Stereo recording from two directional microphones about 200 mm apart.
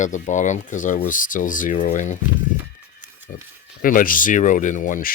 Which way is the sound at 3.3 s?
45° left (ahead or behind).